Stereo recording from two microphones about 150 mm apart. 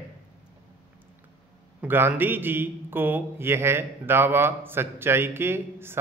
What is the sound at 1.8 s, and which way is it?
Speech, 15° right (ahead or behind).